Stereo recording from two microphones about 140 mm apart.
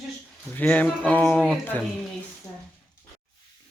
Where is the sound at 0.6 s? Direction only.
10° left (ahead or behind).